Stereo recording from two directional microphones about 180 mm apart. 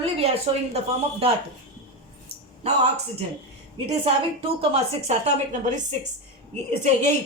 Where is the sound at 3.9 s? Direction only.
30° right (ahead or behind).